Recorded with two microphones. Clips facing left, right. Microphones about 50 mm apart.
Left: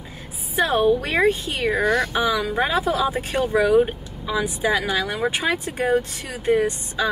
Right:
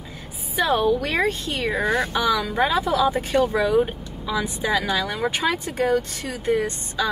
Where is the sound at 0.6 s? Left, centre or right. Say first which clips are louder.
Left 1 dB; centre.